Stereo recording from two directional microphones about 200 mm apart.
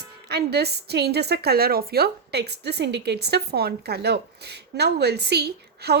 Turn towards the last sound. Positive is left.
turn(degrees=-55)  # may be behind; listen again after turning